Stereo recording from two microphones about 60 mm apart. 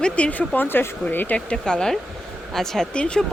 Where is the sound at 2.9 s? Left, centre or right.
Centre.